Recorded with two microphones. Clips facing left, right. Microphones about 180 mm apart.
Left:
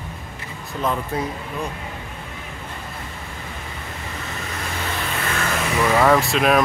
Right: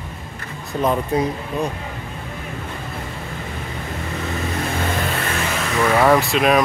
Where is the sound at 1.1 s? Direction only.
15° right (ahead or behind).